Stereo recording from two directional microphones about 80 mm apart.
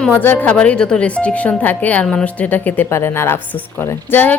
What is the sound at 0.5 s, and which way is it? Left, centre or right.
A woman's voice, centre.